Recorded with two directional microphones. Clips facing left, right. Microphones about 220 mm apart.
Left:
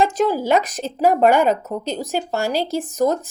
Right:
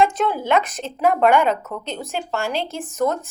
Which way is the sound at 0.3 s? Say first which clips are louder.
Left 2 dB; 40° left (ahead or behind).